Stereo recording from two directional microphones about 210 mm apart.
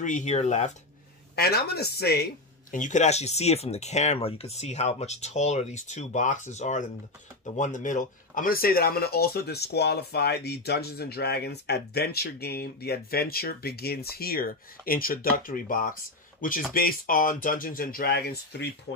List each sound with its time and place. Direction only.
0.0 s speech: 35° left (ahead or behind)
1.3 s speech: 50° left (ahead or behind)
2.7 s speech: 35° left (ahead or behind)